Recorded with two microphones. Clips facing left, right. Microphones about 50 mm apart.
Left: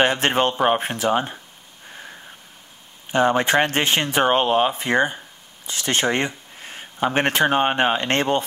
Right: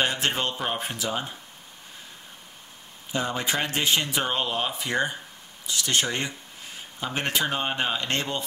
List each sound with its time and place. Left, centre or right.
0.0 s speech: left
3.1 s speech: left